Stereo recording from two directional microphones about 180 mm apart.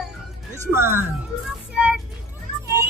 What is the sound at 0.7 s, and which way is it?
Speech, 15° right (ahead or behind).